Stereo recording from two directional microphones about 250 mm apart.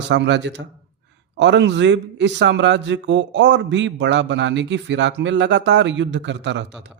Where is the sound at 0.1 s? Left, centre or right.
Right.